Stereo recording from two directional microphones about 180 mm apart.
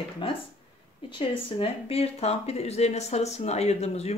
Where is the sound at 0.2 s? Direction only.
30° left (ahead or behind).